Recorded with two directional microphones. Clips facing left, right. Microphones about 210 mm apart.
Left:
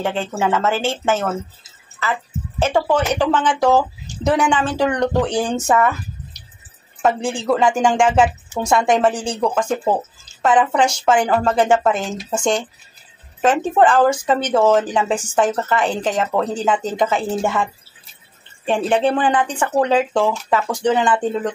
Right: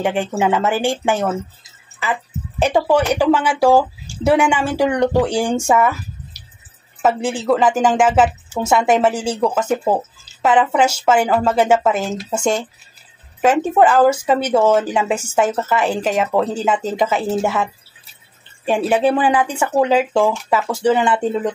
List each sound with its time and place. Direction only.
0.0 s speech: 15° right (ahead or behind)
7.0 s a woman's voice: 5° right (ahead or behind)
18.7 s speech: 5° right (ahead or behind)